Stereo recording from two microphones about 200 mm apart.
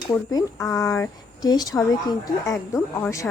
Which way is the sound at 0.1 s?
15° left (ahead or behind).